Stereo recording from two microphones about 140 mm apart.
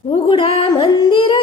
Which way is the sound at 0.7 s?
35° left (ahead or behind).